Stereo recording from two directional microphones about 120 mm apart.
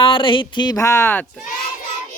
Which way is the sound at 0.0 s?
45° left (ahead or behind).